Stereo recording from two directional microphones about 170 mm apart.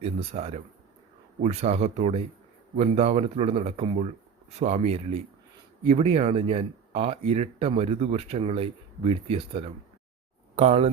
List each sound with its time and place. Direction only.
0.0 s speech: 40° right (ahead or behind)